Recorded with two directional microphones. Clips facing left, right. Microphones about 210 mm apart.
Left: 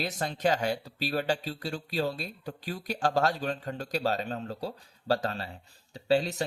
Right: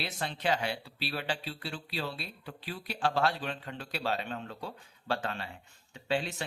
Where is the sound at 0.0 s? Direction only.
45° left (ahead or behind).